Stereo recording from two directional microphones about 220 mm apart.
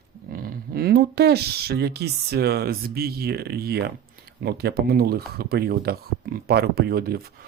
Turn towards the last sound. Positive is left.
turn(degrees=-45)  # may be behind; listen again after turning